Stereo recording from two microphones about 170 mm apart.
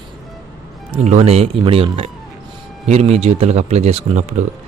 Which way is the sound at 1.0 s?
40° right (ahead or behind).